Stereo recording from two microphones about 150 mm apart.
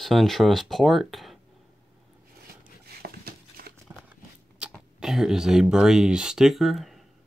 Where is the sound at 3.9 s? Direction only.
20° right (ahead or behind).